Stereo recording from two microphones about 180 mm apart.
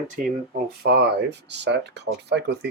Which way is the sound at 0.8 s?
65° right (ahead or behind).